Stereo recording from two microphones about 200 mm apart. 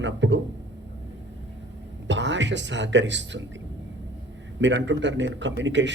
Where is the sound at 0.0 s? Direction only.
65° right (ahead or behind).